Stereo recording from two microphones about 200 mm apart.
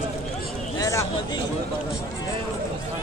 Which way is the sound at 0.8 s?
15° left (ahead or behind).